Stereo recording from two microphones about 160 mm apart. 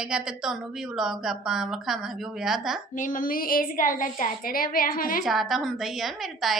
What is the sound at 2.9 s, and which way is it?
A woman's voice, 55° left (ahead or behind).